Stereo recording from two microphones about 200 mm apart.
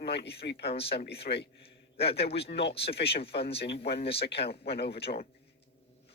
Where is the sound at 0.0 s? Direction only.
55° left (ahead or behind).